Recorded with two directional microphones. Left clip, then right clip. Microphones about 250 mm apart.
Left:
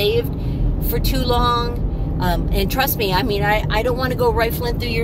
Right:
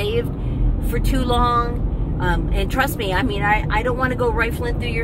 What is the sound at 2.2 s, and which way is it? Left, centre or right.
A woman's voice, centre.